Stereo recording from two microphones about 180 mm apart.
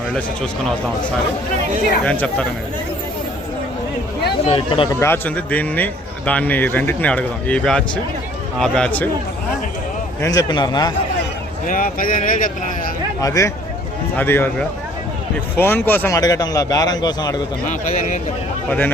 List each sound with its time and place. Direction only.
2.0 s speech: 5° left (ahead or behind)
4.4 s speech: 30° left (ahead or behind)
4.9 s a man's voice: 15° left (ahead or behind)
10.2 s speech: 20° left (ahead or behind)
11.6 s a man's voice: 50° left (ahead or behind)
13.2 s speech: 20° left (ahead or behind)
17.7 s a man's voice: 45° left (ahead or behind)